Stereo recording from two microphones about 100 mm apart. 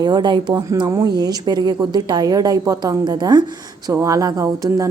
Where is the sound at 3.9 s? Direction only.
30° right (ahead or behind).